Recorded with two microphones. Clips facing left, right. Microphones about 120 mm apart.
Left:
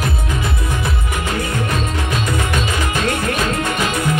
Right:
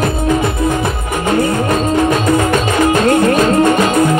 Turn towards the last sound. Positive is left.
turn(degrees=-45)  # may be behind; listen again after turning